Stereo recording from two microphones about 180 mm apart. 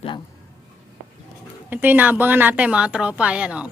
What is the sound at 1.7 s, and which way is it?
Speech, 10° right (ahead or behind).